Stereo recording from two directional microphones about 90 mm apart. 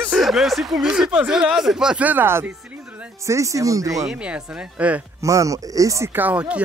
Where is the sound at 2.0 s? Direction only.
25° right (ahead or behind).